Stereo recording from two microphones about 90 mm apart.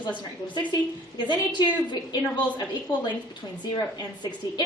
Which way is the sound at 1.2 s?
60° left (ahead or behind).